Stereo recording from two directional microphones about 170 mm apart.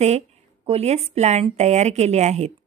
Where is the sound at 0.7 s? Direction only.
40° right (ahead or behind).